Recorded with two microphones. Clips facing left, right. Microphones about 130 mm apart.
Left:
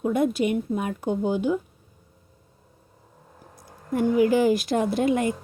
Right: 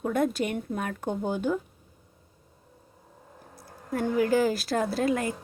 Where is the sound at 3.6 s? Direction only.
15° left (ahead or behind).